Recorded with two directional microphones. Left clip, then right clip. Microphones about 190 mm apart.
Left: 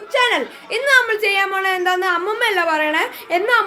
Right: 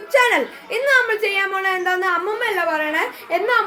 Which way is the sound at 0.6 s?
5° left (ahead or behind).